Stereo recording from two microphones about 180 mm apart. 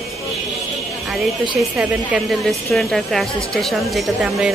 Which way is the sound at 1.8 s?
5° right (ahead or behind).